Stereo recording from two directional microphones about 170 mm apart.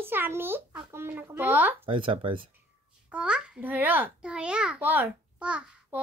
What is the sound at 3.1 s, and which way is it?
A child's voice, 5° right (ahead or behind).